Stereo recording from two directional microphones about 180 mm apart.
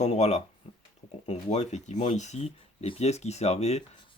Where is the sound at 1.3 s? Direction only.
40° left (ahead or behind).